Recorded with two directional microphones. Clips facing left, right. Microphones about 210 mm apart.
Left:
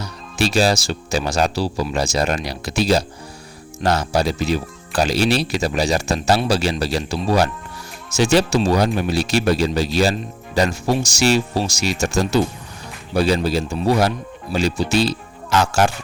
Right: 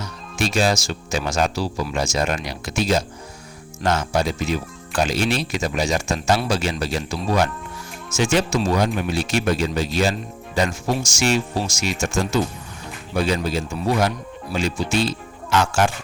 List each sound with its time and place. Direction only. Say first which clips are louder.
0.0 s speech: left 3 dB; 35° left (ahead or behind)